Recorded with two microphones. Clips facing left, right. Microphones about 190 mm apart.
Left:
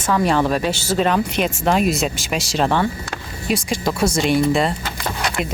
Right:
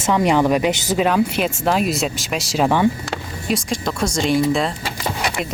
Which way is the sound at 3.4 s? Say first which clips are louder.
Left 2 dB; centre (ahead or behind).